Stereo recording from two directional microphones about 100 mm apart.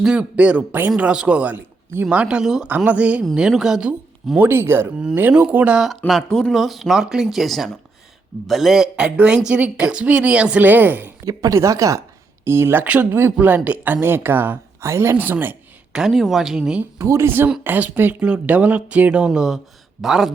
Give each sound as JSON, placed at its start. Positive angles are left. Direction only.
{"t": 0.0, "sound": "a woman's voice", "side_deg": -10}
{"t": 2.6, "sound": "a woman's voice", "side_deg": -15}
{"t": 4.4, "sound": "a woman's voice", "side_deg": -25}
{"t": 6.1, "sound": "a woman's voice", "side_deg": 5}
{"t": 11.3, "sound": "speech", "side_deg": -35}
{"t": 15.9, "sound": "speech", "side_deg": -5}
{"t": 17.0, "sound": "a woman's voice", "side_deg": -30}